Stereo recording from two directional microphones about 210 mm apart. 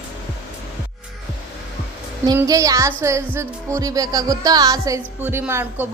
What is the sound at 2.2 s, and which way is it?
Music, 15° right (ahead or behind).